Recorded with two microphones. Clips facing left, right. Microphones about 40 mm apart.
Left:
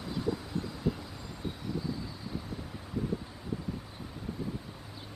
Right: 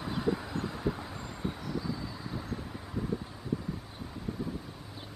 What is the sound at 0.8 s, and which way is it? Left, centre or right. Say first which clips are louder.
Vehicle: left 2 dB; right.